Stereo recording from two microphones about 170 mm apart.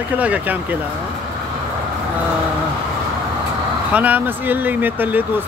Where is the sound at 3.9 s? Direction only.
10° right (ahead or behind).